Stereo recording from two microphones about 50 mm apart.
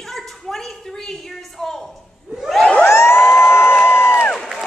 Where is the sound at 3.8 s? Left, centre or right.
Left.